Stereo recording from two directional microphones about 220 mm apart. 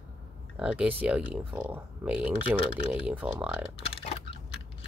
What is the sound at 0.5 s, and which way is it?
Speech, 5° right (ahead or behind).